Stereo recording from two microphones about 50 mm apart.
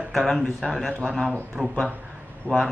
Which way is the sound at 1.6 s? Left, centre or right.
Centre.